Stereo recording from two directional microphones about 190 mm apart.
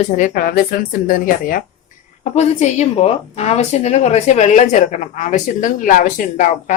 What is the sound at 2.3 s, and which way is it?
A woman's voice, 35° left (ahead or behind).